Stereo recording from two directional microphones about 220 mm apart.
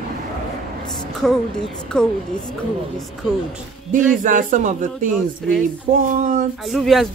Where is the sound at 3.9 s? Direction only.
35° right (ahead or behind).